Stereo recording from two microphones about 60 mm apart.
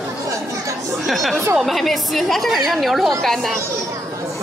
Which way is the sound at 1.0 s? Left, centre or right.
Centre.